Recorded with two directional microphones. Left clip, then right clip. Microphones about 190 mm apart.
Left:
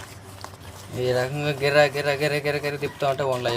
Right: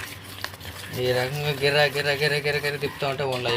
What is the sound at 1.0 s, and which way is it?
Speech, 35° left (ahead or behind).